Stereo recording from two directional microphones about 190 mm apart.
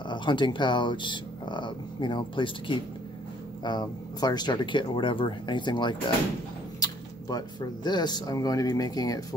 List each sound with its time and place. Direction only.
0.1 s speech: 25° left (ahead or behind)